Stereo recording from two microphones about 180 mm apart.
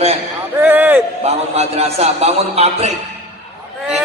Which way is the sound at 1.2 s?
35° right (ahead or behind).